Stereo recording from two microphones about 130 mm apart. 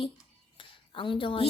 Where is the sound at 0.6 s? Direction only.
40° left (ahead or behind).